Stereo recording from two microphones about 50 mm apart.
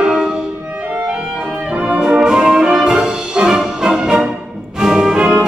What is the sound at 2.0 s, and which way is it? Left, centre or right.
Music, right.